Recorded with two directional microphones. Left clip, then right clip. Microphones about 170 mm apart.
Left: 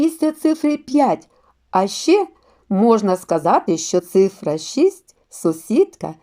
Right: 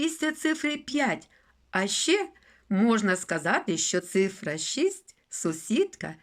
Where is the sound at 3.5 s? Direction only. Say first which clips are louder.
Left 11 dB; 15° left (ahead or behind).